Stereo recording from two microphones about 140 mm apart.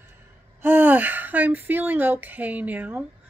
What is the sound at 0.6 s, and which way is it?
Speech, 15° right (ahead or behind).